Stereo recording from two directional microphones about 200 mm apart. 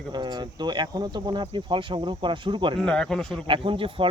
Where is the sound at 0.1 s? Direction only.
20° right (ahead or behind).